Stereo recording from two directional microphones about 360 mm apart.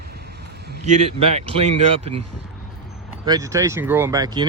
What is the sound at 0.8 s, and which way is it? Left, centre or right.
Speech, centre.